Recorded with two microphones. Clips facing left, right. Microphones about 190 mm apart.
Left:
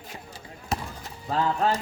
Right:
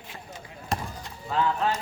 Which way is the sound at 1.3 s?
40° left (ahead or behind).